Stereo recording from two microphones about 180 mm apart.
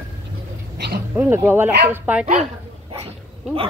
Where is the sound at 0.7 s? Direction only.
65° right (ahead or behind).